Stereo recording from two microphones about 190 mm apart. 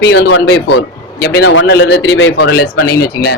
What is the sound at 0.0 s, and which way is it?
Speech, 70° left (ahead or behind).